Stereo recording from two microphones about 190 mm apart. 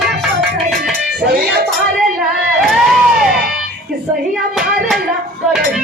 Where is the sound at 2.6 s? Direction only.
Centre (ahead or behind).